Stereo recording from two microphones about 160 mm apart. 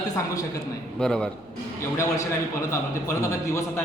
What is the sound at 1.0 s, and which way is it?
Speech, 5° left (ahead or behind).